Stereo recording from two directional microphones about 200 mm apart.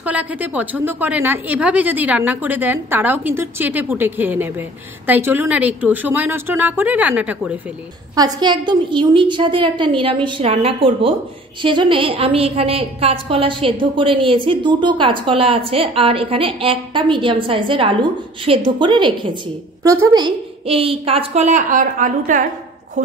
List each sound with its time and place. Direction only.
0.0 s a woman's voice: 5° right (ahead or behind)
8.2 s a woman's voice: 20° right (ahead or behind); by 23.1 s 40° right (ahead or behind)